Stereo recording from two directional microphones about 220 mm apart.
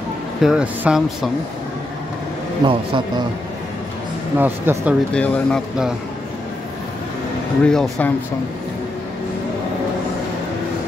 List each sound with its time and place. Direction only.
0.4 s speech: 5° right (ahead or behind)
2.6 s speech: 20° right (ahead or behind)
4.4 s speech: 10° right (ahead or behind)
5.1 s speech: 5° left (ahead or behind)
7.6 s speech: 5° left (ahead or behind)